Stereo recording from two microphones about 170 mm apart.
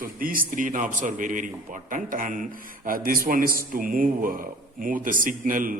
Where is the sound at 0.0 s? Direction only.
55° right (ahead or behind).